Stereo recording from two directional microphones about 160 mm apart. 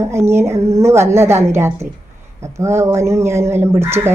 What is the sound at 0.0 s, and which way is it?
A woman's voice, 15° right (ahead or behind).